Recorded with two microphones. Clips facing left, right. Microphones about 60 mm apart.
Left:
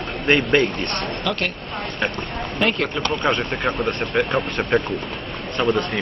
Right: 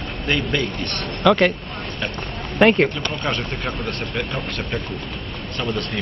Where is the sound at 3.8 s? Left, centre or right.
Centre.